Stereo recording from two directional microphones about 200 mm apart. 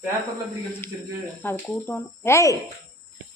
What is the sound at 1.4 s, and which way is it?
Speech, 10° left (ahead or behind).